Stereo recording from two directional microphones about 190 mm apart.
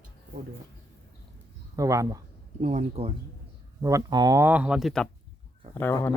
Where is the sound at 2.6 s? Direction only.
40° right (ahead or behind).